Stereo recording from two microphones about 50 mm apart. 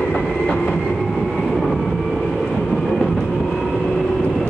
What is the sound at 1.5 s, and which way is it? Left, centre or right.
Train, centre.